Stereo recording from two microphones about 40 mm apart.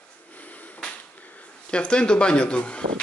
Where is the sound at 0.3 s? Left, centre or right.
Left.